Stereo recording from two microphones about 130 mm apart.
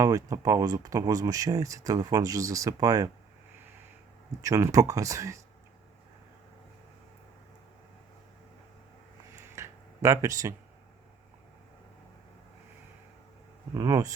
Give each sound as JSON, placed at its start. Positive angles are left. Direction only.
{"t": 0.0, "sound": "speech", "side_deg": -25}
{"t": 4.4, "sound": "speech", "side_deg": -25}
{"t": 9.4, "sound": "tick-tock", "side_deg": -20}
{"t": 13.7, "sound": "speech", "side_deg": -25}